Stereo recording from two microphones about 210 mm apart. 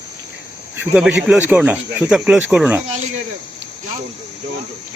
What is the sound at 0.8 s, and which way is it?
Speech, 5° right (ahead or behind).